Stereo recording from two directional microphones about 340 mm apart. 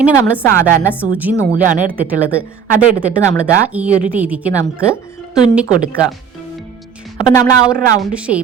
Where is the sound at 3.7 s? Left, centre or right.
Centre.